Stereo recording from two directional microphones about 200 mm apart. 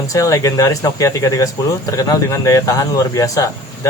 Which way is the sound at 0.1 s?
15° left (ahead or behind).